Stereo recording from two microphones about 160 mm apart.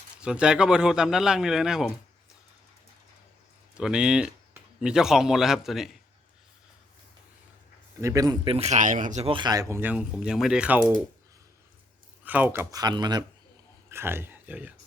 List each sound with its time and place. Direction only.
0.2 s speech: 5° right (ahead or behind)
3.8 s speech: 5° right (ahead or behind)
8.0 s speech: 20° right (ahead or behind)
8.4 s speech: 40° right (ahead or behind)
9.2 s speech: 30° right (ahead or behind); by 10.9 s 5° right (ahead or behind)
12.2 s speech: 10° right (ahead or behind)
12.8 s speech: 25° right (ahead or behind)
13.9 s speech: 15° right (ahead or behind)